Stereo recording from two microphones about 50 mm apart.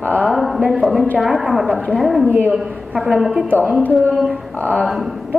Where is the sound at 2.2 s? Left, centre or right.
Right.